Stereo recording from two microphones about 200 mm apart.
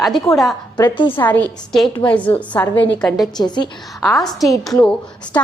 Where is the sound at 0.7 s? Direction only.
20° left (ahead or behind).